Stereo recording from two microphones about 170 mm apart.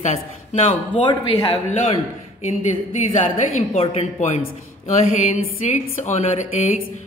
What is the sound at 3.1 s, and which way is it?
A woman's voice, 40° left (ahead or behind).